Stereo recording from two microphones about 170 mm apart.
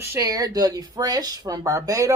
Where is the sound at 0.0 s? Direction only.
15° right (ahead or behind).